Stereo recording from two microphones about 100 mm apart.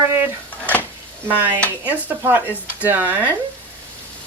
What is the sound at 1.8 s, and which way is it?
Speech, 20° right (ahead or behind).